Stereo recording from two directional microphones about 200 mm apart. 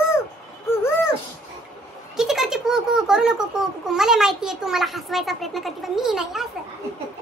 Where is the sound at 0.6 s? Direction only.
10° left (ahead or behind).